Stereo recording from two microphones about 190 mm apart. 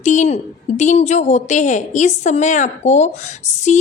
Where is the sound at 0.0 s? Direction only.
40° left (ahead or behind).